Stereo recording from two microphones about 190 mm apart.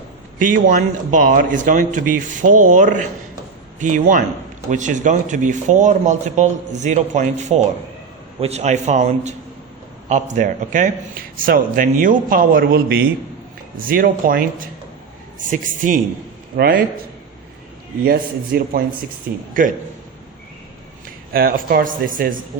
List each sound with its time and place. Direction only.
0.3 s a man's voice: 45° right (ahead or behind)
18.0 s a man's voice: 55° right (ahead or behind)
21.3 s a man's voice: 50° right (ahead or behind)